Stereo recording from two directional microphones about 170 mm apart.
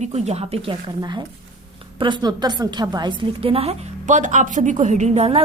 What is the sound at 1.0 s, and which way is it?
A woman's voice, 25° right (ahead or behind).